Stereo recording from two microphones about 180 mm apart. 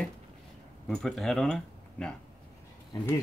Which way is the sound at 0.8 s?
Centre (ahead or behind).